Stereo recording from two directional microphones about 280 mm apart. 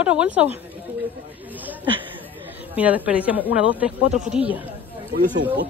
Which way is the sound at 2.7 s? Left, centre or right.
Centre.